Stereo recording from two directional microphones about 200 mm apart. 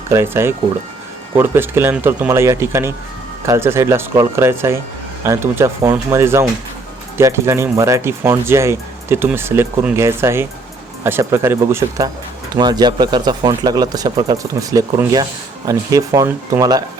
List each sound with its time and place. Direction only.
0.1 s speech: 15° right (ahead or behind)